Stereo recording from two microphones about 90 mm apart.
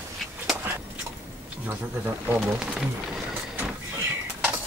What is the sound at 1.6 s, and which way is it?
Speech, 20° right (ahead or behind).